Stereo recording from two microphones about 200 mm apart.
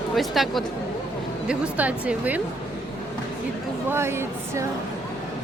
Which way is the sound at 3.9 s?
10° right (ahead or behind).